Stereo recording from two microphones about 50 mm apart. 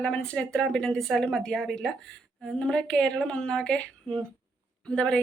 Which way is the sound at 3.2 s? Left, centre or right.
Centre.